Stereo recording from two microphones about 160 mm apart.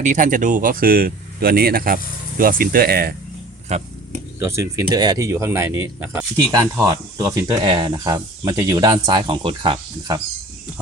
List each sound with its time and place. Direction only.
0.0 s speech: 55° right (ahead or behind); by 3.2 s 70° right (ahead or behind)
3.7 s speech: 40° right (ahead or behind)
4.4 s speech: 15° right (ahead or behind); by 10.2 s 35° right (ahead or behind)